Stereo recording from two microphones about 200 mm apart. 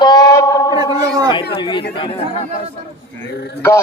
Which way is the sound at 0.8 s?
20° right (ahead or behind).